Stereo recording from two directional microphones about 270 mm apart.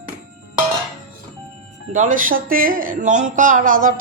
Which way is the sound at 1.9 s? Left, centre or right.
Right.